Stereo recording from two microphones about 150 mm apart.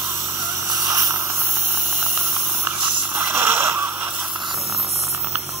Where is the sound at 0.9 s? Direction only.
15° right (ahead or behind).